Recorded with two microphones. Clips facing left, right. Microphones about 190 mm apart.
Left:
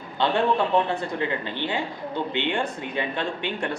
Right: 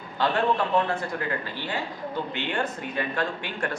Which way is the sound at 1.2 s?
20° left (ahead or behind).